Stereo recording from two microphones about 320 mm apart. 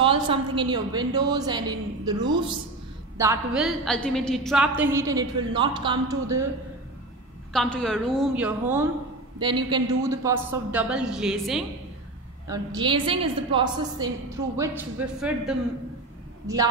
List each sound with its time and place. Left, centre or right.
0.0 s a woman's voice: centre
3.2 s a woman's voice: centre
7.5 s a woman's voice: centre
12.4 s a woman's voice: centre